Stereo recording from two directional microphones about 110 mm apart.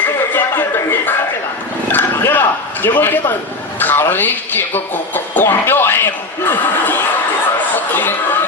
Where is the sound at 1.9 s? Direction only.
15° left (ahead or behind).